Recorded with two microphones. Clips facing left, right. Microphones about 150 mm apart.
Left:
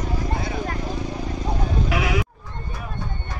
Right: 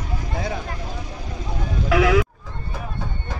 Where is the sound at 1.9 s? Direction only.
90° right.